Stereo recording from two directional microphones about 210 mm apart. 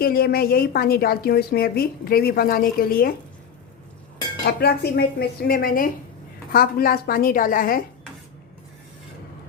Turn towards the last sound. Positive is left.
turn(degrees=40)  # may be behind; listen again after turning